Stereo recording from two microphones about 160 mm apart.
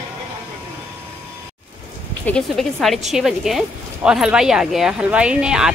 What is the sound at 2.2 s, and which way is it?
Speech, 5° left (ahead or behind).